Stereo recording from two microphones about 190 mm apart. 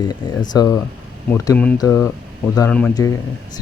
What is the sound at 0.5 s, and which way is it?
Speech, 20° left (ahead or behind).